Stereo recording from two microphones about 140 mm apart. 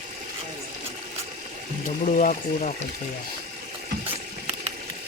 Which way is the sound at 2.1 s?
70° left (ahead or behind).